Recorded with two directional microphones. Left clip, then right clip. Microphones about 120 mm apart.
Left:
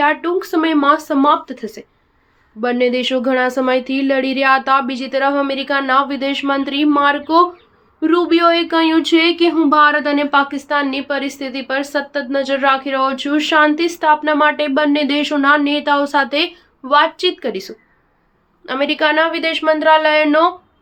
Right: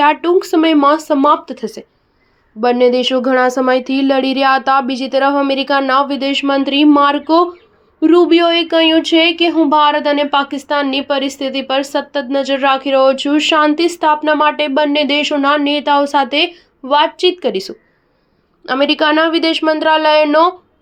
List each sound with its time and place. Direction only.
0.0 s speech: 40° right (ahead or behind)